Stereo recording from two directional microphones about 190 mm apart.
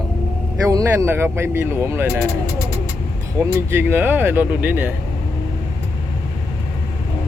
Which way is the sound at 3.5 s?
10° right (ahead or behind).